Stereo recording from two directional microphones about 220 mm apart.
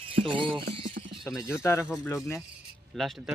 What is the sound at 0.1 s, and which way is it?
Speech, 25° right (ahead or behind).